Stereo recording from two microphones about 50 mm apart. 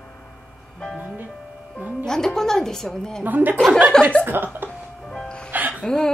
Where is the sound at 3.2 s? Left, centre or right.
Right.